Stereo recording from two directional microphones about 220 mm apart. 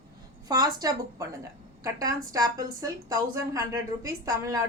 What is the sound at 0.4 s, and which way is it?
A woman's voice, 15° right (ahead or behind).